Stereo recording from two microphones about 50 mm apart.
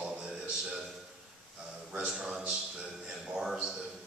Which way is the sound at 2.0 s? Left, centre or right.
Centre.